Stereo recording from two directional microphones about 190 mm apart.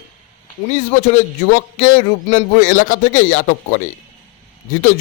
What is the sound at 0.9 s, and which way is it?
A man's voice, 40° left (ahead or behind).